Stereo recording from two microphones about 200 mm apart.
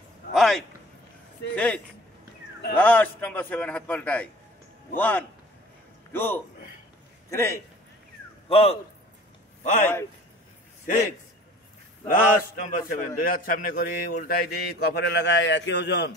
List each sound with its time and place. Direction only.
0.3 s a sound: centre (ahead or behind)
1.5 s a man's voice: 5° left (ahead or behind)
2.8 s a man's voice: 10° left (ahead or behind)
8.5 s a man's voice: 30° left (ahead or behind)
12.1 s a man's voice: 45° left (ahead or behind); by 16.2 s 60° left (ahead or behind)